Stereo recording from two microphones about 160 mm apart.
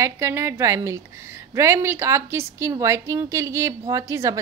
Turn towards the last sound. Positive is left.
turn(degrees=-20)  # may be behind; listen again after turning